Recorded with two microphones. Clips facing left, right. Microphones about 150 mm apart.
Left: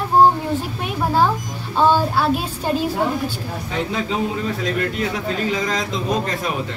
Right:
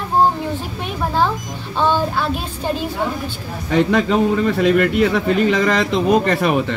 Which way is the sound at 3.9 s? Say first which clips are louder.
Right 7 dB; 70° right (ahead or behind).